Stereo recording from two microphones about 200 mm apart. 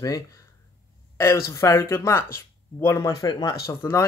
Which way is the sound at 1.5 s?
15° left (ahead or behind).